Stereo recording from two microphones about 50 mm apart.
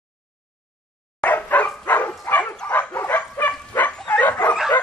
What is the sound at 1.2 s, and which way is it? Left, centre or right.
Dog, left.